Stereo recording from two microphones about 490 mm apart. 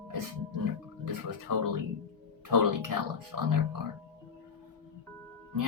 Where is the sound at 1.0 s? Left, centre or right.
Right.